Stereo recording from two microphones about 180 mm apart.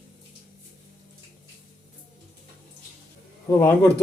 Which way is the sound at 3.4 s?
15° left (ahead or behind).